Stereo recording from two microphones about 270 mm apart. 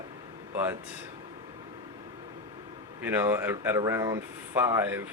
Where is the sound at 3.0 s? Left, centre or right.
Centre.